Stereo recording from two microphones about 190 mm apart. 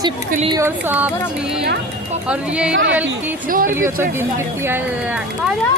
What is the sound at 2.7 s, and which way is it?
Speech, 75° right (ahead or behind).